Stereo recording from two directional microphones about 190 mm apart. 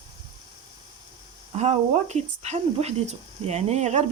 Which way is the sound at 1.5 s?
35° right (ahead or behind).